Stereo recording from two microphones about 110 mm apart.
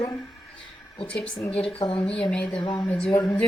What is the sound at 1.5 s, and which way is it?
Speech, 60° left (ahead or behind).